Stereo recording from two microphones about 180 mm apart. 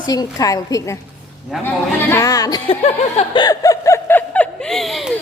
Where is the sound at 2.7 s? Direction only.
30° left (ahead or behind).